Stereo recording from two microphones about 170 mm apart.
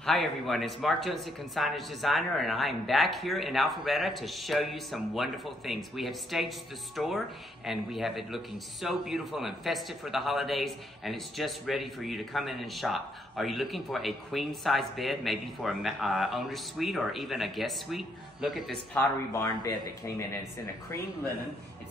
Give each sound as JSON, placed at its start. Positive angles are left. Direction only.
{"t": 0.0, "sound": "speech", "side_deg": 0}
{"t": 18.9, "sound": "speech", "side_deg": 20}